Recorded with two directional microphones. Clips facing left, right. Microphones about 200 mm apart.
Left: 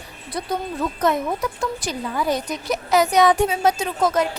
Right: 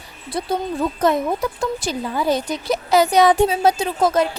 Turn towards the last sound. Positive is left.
turn(degrees=-30)  # may be behind; listen again after turning